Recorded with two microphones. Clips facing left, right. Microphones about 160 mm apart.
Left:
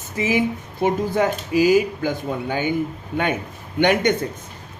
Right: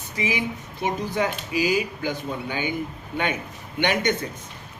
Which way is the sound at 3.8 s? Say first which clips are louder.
Left 5 dB; 50° left (ahead or behind).